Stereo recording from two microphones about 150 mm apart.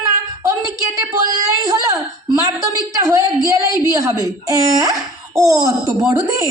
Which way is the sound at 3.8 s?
25° right (ahead or behind).